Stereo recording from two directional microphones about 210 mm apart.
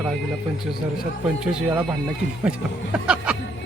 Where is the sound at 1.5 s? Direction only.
5° right (ahead or behind).